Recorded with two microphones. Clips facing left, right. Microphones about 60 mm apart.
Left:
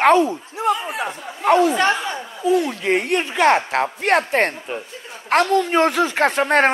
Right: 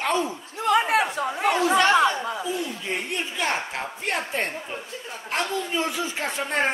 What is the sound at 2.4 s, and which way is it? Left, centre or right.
Speech, left.